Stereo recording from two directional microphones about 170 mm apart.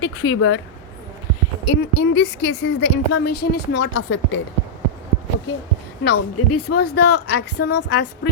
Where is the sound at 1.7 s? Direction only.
90° left.